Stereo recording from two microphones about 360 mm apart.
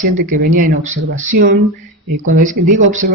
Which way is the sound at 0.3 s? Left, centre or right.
Right.